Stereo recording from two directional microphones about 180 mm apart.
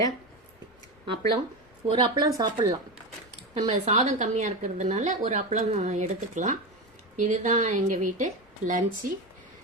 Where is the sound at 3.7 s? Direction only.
35° right (ahead or behind).